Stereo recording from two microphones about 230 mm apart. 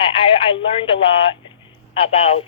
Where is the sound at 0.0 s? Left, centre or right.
Left.